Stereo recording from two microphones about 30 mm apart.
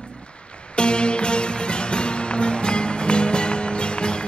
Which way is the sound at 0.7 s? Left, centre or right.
Left.